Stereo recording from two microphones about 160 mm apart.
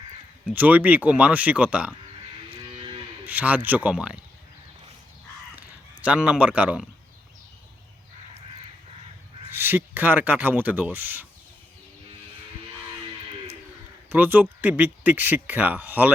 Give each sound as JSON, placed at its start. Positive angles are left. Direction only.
{"t": 0.5, "sound": "speech", "side_deg": -10}
{"t": 2.7, "sound": "cattle", "side_deg": -35}
{"t": 3.2, "sound": "speech", "side_deg": -10}
{"t": 6.0, "sound": "speech", "side_deg": -5}
{"t": 9.5, "sound": "speech", "side_deg": -15}
{"t": 14.1, "sound": "speech", "side_deg": -10}